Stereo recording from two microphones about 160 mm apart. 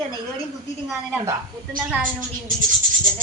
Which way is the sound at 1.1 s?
15° right (ahead or behind).